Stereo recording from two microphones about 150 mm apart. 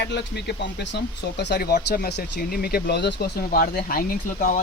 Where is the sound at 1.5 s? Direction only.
90° left.